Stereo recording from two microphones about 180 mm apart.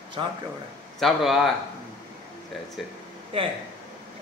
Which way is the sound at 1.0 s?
Centre (ahead or behind).